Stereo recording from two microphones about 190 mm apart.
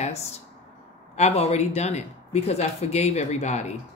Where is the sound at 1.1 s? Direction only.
35° left (ahead or behind).